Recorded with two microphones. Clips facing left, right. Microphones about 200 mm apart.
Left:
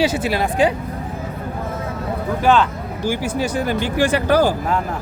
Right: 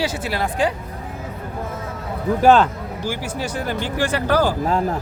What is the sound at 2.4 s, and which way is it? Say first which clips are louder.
Speech: right 2 dB; 45° right (ahead or behind).